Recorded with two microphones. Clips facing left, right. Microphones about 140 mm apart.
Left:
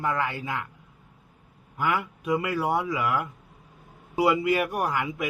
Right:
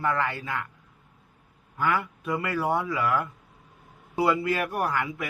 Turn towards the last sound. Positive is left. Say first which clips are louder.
# left 1 dB
turn(degrees=15)  # may be behind; listen again after turning